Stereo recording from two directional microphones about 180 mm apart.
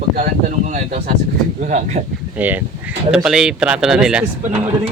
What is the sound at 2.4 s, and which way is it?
Speech, 10° right (ahead or behind).